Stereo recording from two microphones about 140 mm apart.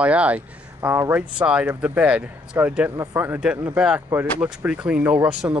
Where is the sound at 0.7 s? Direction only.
20° right (ahead or behind).